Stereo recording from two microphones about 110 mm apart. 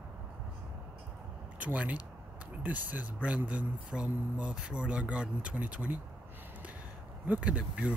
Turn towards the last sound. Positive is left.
turn(degrees=-10)  # may be behind; listen again after turning